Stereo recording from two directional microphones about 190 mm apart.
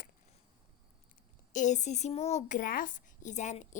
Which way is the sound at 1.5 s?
40° left (ahead or behind).